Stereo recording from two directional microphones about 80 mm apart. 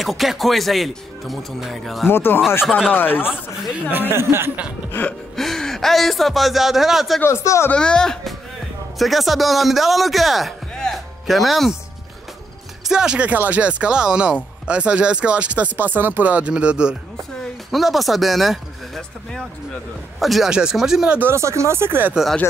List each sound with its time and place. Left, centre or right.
0.0 s speech: centre
2.0 s speech: left
4.1 s speech: right
5.3 s speech: centre
7.2 s speech: left
7.7 s a man's voice: centre
12.8 s speech: centre
17.6 s speech: centre
21.2 s speech: right